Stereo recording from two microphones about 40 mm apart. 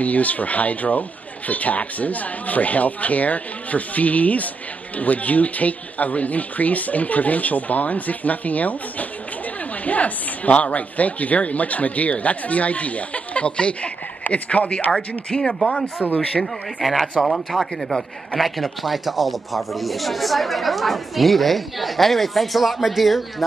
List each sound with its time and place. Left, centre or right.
0.0 s speech: left
15.2 s speech: left
16.8 s speech: centre